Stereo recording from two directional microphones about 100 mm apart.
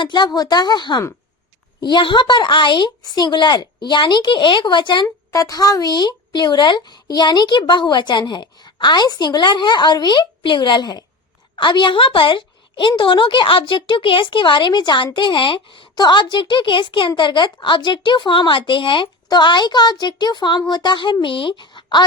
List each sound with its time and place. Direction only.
0.0 s speech: 50° left (ahead or behind)
5.3 s a woman's voice: 35° left (ahead or behind); by 22.0 s 50° left (ahead or behind)